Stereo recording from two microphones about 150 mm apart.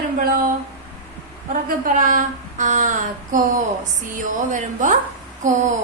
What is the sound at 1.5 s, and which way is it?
A woman's voice, 60° right (ahead or behind).